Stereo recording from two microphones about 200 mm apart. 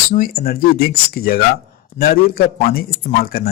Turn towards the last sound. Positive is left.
turn(degrees=50)  # may be behind; listen again after turning